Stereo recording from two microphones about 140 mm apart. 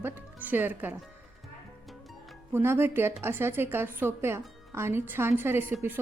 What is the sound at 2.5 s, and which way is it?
A woman's voice, 15° right (ahead or behind).